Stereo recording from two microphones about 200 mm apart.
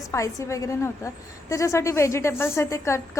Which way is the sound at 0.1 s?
15° left (ahead or behind).